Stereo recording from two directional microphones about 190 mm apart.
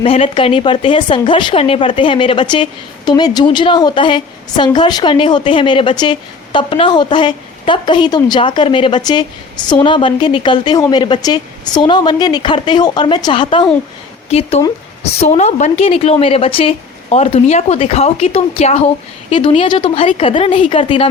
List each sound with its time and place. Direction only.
0.0 s a woman's voice: 30° left (ahead or behind)